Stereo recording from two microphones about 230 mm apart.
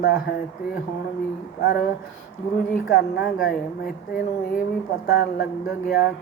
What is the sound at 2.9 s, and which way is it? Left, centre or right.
Speech, left.